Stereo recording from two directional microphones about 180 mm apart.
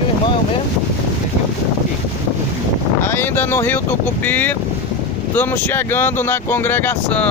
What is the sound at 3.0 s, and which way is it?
Speech, 10° left (ahead or behind).